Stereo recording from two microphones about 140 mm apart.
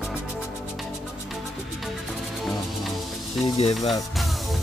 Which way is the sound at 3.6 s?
50° left (ahead or behind).